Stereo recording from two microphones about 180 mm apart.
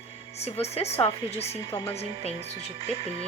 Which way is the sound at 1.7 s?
15° left (ahead or behind).